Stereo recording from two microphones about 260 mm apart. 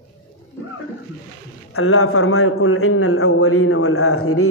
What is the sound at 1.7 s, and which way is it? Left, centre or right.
A man's voice, left.